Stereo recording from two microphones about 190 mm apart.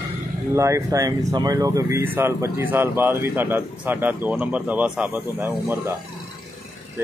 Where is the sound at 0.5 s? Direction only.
15° right (ahead or behind).